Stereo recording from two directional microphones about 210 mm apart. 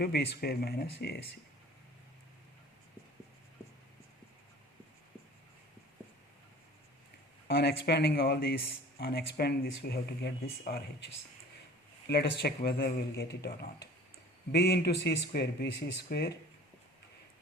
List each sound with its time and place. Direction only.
0.0 s speech: 50° left (ahead or behind)
7.4 s speech: 45° left (ahead or behind)